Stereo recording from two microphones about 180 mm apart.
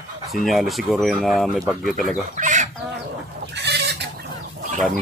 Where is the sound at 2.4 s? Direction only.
45° right (ahead or behind).